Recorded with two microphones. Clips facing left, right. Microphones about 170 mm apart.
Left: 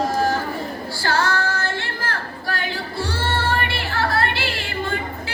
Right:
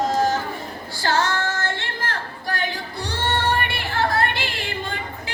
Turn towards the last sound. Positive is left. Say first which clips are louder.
# left 2 dB
turn(degrees=-20)  # may be behind; listen again after turning